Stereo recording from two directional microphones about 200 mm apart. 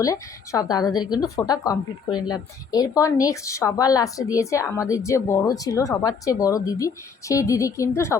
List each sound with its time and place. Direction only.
0.0 s speech: 15° left (ahead or behind)